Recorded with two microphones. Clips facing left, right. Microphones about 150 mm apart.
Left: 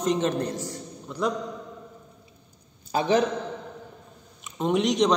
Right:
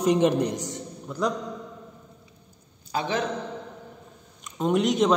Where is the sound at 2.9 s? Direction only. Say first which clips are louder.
Left 5 dB; 25° left (ahead or behind).